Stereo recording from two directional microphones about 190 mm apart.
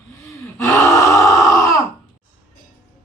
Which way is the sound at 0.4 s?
15° left (ahead or behind).